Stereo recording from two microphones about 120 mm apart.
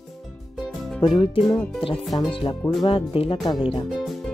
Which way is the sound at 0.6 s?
Centre (ahead or behind).